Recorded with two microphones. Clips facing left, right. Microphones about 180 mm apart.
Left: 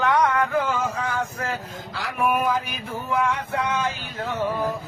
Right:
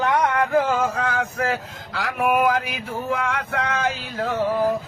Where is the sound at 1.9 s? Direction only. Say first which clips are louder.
Right 3 dB; 85° right.